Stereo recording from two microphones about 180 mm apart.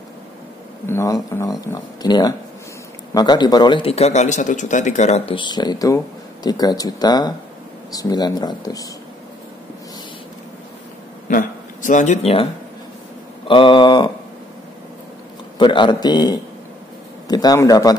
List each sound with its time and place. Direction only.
0.8 s speech: 15° left (ahead or behind)
11.2 s speech: 45° left (ahead or behind)
13.5 s speech: 30° left (ahead or behind)
15.6 s speech: 25° left (ahead or behind)